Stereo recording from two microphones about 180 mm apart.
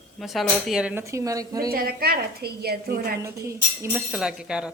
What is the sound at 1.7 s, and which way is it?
A woman's voice, 55° right (ahead or behind).